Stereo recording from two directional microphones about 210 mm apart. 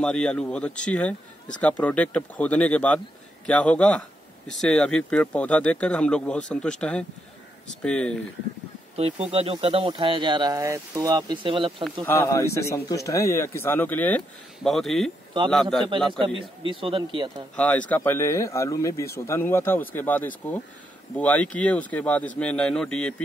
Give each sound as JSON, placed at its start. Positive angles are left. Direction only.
{"t": 0.0, "sound": "speech", "side_deg": 5}
{"t": 8.9, "sound": "speech", "side_deg": -30}
{"t": 11.8, "sound": "speech", "side_deg": 10}
{"t": 16.1, "sound": "speech", "side_deg": -25}
{"t": 17.6, "sound": "speech", "side_deg": 5}